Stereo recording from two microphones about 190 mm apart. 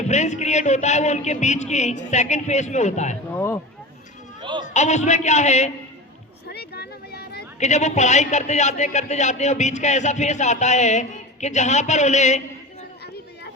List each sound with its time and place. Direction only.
0.0 s a man's voice: 35° left (ahead or behind)
3.3 s speech: 10° left (ahead or behind)
4.4 s a sound: 25° right (ahead or behind)
4.6 s a man's voice: 35° left (ahead or behind)
6.5 s a sound: 60° left (ahead or behind)
7.6 s a man's voice: 40° left (ahead or behind)